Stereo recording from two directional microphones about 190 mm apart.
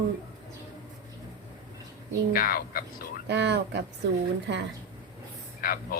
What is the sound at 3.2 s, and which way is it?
Speech, 65° right (ahead or behind).